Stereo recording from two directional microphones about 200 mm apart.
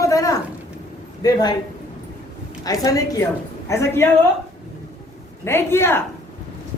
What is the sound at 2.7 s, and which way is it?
A man's voice, 15° left (ahead or behind).